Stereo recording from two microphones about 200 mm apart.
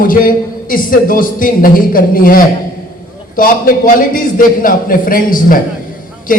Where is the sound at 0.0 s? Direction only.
45° left (ahead or behind).